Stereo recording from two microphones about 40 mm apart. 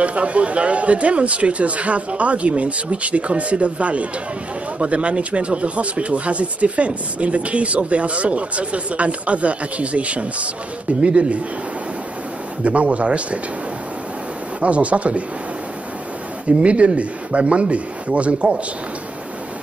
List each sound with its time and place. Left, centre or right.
0.0 s speech: right
12.6 s speech: right
14.6 s speech: right
16.6 s speech: right